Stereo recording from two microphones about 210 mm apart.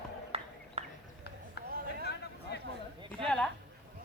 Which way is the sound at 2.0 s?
50° left (ahead or behind).